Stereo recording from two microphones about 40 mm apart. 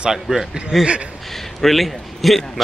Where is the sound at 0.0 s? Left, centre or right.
Centre.